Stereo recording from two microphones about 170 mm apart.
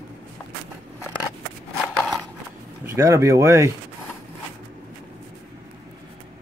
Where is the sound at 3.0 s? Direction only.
20° right (ahead or behind).